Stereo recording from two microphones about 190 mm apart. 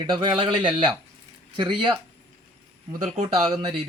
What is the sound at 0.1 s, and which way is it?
Speech, 25° right (ahead or behind).